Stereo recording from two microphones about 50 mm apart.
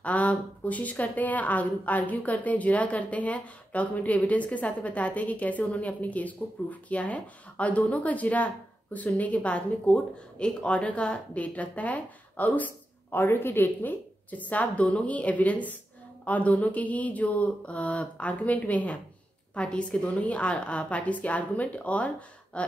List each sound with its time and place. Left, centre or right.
0.0 s a woman's voice: left
13.2 s a woman's voice: left
14.3 s a woman's voice: left
19.5 s a woman's voice: centre